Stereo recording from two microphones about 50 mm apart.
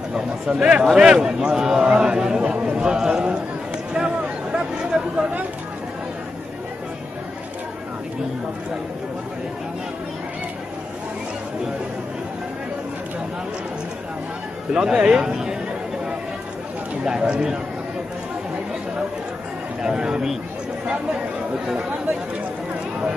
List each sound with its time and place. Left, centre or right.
0.1 s a man's voice: centre
3.9 s a sound: centre
14.7 s a man's voice: centre
17.0 s a man's voice: centre
19.8 s a man's voice: centre